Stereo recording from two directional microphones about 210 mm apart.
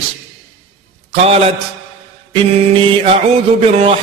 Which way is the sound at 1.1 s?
30° right (ahead or behind).